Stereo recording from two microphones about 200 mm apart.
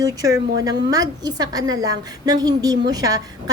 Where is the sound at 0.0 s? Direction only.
15° right (ahead or behind).